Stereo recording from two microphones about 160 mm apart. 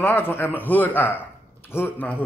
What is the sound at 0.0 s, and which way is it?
A man's voice, 15° left (ahead or behind).